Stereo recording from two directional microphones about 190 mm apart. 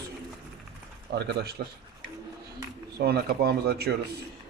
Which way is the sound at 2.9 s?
55° right (ahead or behind).